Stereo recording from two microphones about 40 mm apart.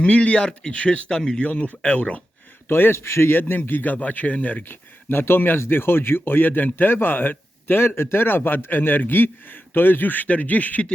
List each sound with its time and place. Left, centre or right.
0.0 s speech: left
2.6 s speech: left
3.9 s speech: left
4.6 s speech: left